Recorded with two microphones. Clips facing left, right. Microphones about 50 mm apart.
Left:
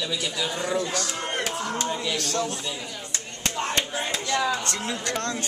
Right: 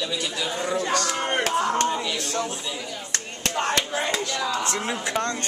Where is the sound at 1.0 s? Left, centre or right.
Right.